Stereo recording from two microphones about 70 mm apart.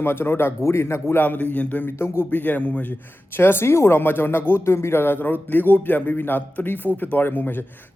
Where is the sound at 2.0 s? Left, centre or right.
Left.